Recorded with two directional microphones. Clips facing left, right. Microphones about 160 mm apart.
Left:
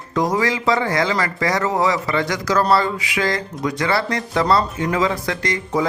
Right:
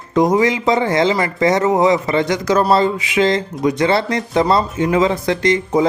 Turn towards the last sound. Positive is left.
turn(degrees=-20)  # may be behind; listen again after turning